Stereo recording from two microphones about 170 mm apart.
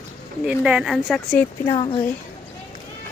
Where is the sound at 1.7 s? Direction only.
30° left (ahead or behind).